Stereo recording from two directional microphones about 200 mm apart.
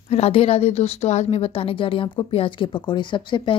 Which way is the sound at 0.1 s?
30° left (ahead or behind).